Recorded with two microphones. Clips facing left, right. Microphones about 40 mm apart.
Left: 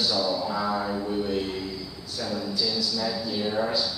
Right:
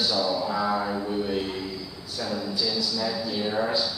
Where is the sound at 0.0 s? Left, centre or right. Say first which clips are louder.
Right 1 dB; centre.